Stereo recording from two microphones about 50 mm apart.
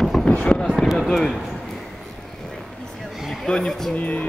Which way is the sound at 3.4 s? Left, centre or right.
Centre.